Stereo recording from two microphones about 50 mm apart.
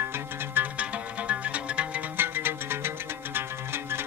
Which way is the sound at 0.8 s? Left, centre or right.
Right.